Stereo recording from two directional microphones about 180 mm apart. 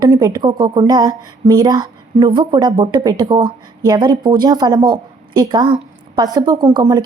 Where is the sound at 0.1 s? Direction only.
20° right (ahead or behind).